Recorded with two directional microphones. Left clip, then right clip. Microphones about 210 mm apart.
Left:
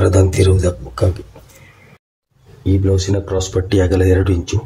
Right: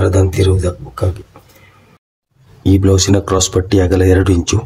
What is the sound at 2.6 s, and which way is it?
Speech, 35° right (ahead or behind).